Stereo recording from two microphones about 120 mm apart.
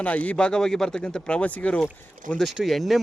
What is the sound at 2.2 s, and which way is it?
Speech, 90° right.